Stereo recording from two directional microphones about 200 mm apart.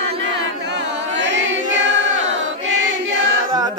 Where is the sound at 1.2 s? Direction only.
65° right (ahead or behind).